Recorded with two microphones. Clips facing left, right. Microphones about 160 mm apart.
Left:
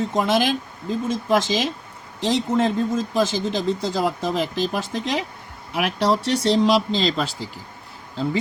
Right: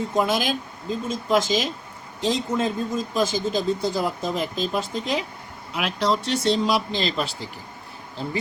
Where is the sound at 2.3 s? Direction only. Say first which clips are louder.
Left 6 dB; 90° left.